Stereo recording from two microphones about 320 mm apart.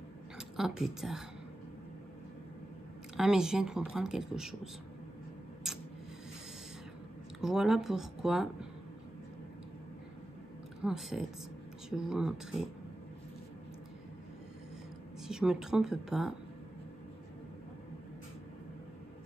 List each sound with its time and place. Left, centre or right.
0.4 s a woman's voice: centre
3.2 s speech: centre
7.3 s speech: centre
10.8 s speech: centre
15.2 s speech: centre